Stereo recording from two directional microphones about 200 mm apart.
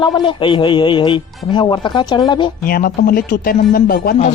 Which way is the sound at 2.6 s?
45° left (ahead or behind).